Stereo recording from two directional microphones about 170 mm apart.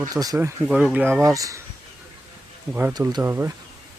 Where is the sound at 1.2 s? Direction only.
20° right (ahead or behind).